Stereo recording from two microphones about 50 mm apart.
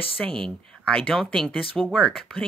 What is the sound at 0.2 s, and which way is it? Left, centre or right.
A woman's voice, centre.